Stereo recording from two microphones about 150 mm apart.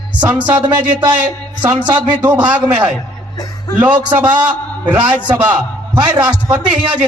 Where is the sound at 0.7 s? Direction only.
30° right (ahead or behind).